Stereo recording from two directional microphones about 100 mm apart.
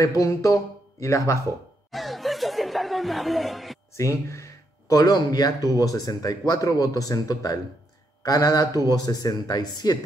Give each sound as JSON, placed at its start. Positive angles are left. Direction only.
{"t": 0.2, "sound": "speech", "side_deg": 35}
{"t": 1.9, "sound": "chuckle", "side_deg": 0}
{"t": 3.9, "sound": "speech", "side_deg": 30}